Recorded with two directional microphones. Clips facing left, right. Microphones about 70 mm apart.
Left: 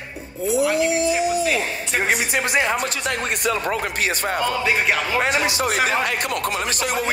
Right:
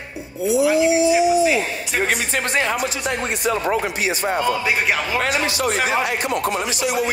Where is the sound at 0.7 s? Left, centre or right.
Left.